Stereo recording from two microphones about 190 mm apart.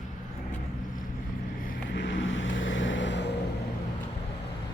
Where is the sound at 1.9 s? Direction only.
75° left (ahead or behind).